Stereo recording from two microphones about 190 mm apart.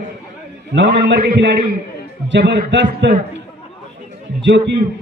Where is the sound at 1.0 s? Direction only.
60° right (ahead or behind).